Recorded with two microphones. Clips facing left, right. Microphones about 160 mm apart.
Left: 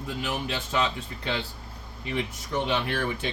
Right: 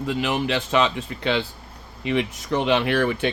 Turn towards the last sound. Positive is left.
turn(degrees=-75)  # may be behind; listen again after turning